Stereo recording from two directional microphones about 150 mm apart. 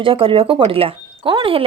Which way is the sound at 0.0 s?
35° right (ahead or behind).